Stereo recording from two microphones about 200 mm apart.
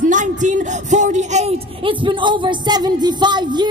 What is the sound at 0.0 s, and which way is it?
Speech, 40° right (ahead or behind).